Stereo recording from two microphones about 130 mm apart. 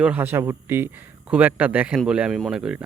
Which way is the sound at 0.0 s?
15° right (ahead or behind).